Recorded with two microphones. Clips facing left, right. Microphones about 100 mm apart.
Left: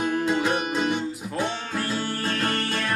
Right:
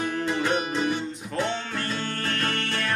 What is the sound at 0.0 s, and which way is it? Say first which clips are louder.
Music: left 3 dB; 15° left (ahead or behind).